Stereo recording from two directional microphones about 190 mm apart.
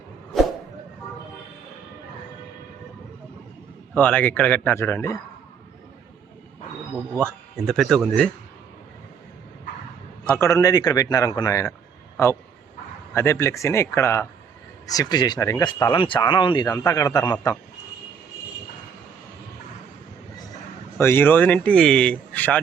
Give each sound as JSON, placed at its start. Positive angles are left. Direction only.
{"t": 3.9, "sound": "speech", "side_deg": 10}
{"t": 7.2, "sound": "speech", "side_deg": 0}
{"t": 10.2, "sound": "a man's voice", "side_deg": 15}
{"t": 21.0, "sound": "speech", "side_deg": 10}